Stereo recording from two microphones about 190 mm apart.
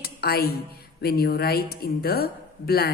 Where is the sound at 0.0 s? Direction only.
55° left (ahead or behind).